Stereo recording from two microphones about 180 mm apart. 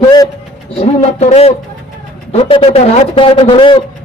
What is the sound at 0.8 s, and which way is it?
A man's voice, 35° left (ahead or behind).